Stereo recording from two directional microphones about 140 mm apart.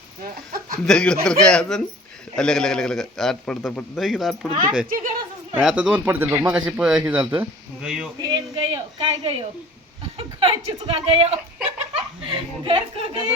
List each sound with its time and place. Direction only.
0.2 s chicken: 90° right
0.9 s a man's voice: 5° left (ahead or behind)
8.7 s speech: 30° right (ahead or behind)